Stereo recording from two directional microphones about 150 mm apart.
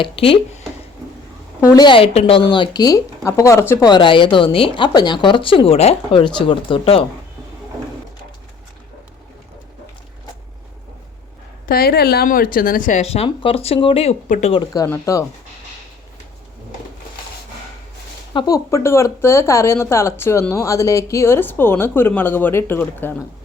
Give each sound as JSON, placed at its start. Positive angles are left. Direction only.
{"t": 0.0, "sound": "a woman's voice", "side_deg": 40}
{"t": 1.6, "sound": "a woman's voice", "side_deg": 30}
{"t": 3.8, "sound": "a woman's voice", "side_deg": 30}
{"t": 11.7, "sound": "speech", "side_deg": 85}
{"t": 14.8, "sound": "speech", "side_deg": 15}
{"t": 18.3, "sound": "speech", "side_deg": 25}